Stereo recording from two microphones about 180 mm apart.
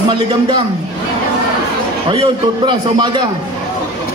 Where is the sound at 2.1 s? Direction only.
25° right (ahead or behind).